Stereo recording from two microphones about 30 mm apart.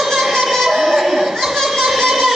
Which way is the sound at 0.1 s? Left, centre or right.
Centre.